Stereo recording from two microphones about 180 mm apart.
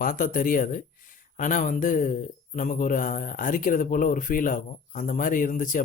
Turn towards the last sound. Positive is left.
turn(degrees=45)  # may be behind; listen again after turning